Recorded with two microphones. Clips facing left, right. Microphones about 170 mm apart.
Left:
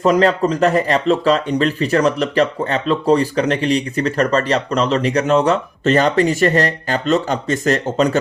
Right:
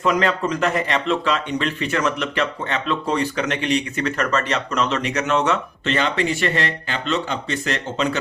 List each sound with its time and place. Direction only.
0.0 s speech: 35° left (ahead or behind)